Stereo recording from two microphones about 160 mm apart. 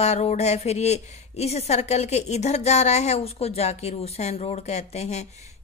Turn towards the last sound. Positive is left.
turn(degrees=45)  # may be behind; listen again after turning